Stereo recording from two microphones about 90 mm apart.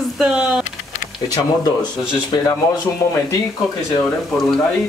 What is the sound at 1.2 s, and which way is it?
Speech, 45° left (ahead or behind).